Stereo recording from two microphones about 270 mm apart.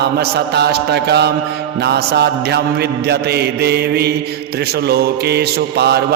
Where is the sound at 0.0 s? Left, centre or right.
Right.